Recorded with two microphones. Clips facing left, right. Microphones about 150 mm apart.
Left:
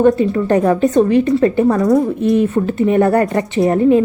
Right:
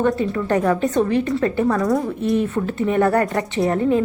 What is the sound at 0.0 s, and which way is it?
Speech, 20° left (ahead or behind).